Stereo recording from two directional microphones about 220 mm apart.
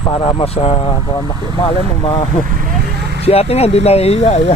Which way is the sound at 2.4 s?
40° right (ahead or behind).